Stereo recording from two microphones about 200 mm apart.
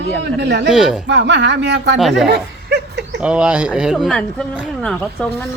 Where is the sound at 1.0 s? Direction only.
60° right (ahead or behind).